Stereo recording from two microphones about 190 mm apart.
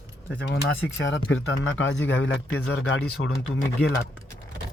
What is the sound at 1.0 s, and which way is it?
A man's voice, 80° left.